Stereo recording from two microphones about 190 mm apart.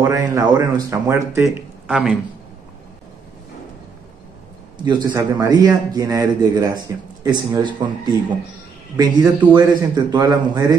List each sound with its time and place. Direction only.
0.0 s speech: 15° right (ahead or behind)
1.9 s speech: 5° right (ahead or behind)
4.8 s a man's voice: 20° right (ahead or behind)